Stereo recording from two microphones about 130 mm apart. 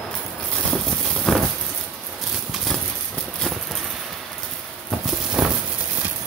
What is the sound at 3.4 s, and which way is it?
Clip-clop, centre (ahead or behind).